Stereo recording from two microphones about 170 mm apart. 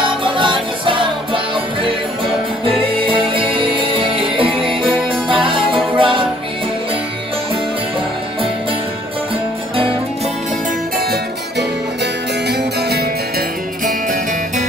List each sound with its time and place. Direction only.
0.0 s music: 30° right (ahead or behind)
3.0 s music: 30° right (ahead or behind)